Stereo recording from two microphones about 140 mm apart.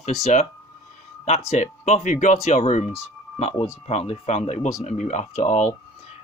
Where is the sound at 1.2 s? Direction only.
50° left (ahead or behind).